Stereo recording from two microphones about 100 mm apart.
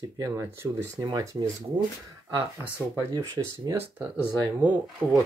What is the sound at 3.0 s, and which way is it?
Speech, 35° right (ahead or behind).